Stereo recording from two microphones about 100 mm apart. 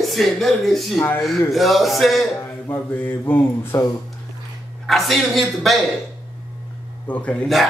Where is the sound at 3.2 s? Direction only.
25° left (ahead or behind).